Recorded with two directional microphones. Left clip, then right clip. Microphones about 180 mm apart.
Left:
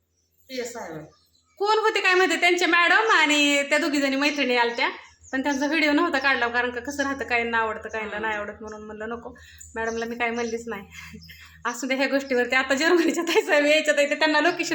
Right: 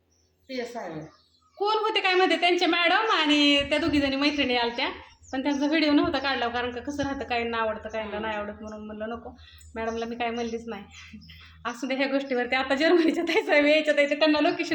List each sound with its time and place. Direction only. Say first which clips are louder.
1.5 s a woman's voice: left 3 dB; 15° left (ahead or behind)